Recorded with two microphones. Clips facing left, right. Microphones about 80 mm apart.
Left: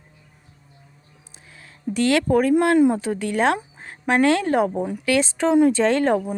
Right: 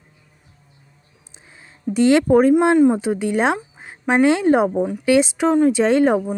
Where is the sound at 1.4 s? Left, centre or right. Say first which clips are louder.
Right 3 dB; right.